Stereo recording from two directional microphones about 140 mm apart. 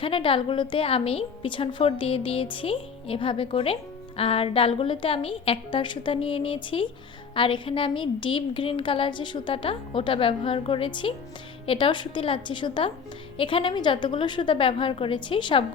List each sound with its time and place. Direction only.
0.0 s a woman's voice: 40° left (ahead or behind)